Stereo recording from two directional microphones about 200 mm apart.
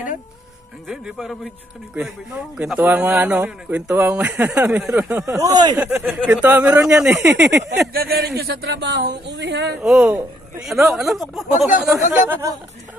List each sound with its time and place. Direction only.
0.8 s a man's voice: centre (ahead or behind)
5.2 s a man's voice: 15° right (ahead or behind)
5.8 s speech: 5° right (ahead or behind)
7.1 s a man's voice: 15° right (ahead or behind)
7.9 s a man's voice: 50° right (ahead or behind)
9.8 s speech: 5° right (ahead or behind)
11.9 s a man's voice: 10° right (ahead or behind)